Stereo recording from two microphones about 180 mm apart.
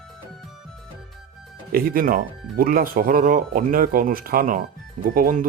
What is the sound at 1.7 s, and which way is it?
Speech, 55° right (ahead or behind).